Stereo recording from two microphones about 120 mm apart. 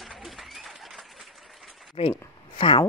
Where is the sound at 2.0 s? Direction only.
45° left (ahead or behind).